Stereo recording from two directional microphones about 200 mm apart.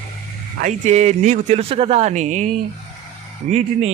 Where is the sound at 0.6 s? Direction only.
35° right (ahead or behind).